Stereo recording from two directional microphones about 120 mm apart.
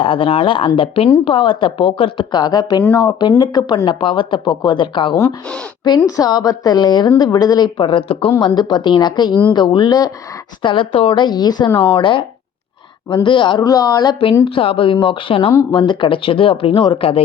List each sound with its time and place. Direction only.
0.0 s a woman's voice: 45° left (ahead or behind)
6.1 s a woman's voice: 30° left (ahead or behind)
13.2 s a woman's voice: 40° left (ahead or behind)
13.7 s a woman's voice: 30° left (ahead or behind)
14.4 s a woman's voice: 50° left (ahead or behind)